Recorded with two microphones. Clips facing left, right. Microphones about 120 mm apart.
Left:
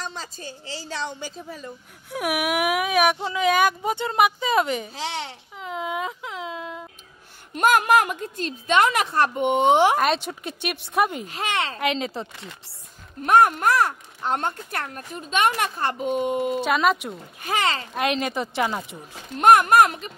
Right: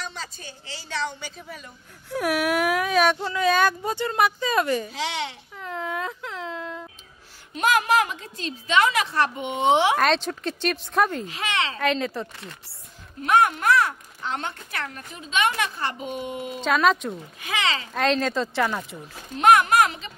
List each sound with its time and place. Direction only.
0.0 s a woman's voice: 35° left (ahead or behind)
2.0 s speech: 10° left (ahead or behind)
5.0 s a woman's voice: 40° left (ahead or behind)
5.6 s whimper: 15° left (ahead or behind)
7.5 s speech: 50° left (ahead or behind)
9.9 s speech: 10° left (ahead or behind)
11.2 s speech: 45° left (ahead or behind)
11.8 s speech: 20° left (ahead or behind)
13.2 s speech: 45° left (ahead or behind)
16.6 s speech: 10° left (ahead or behind)
17.4 s speech: 45° left (ahead or behind)
17.9 s speech: 15° left (ahead or behind)
19.3 s speech: 45° left (ahead or behind)